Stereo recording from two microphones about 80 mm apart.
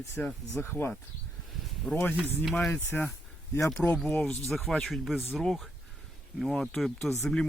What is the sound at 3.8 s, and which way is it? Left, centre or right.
Speech, centre.